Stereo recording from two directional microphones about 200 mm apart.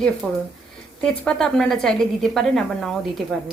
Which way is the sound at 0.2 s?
Centre (ahead or behind).